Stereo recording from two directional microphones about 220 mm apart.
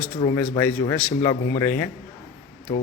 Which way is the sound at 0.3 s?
10° left (ahead or behind).